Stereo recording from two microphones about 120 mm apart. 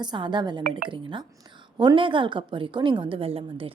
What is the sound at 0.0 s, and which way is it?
A woman's voice, 40° right (ahead or behind).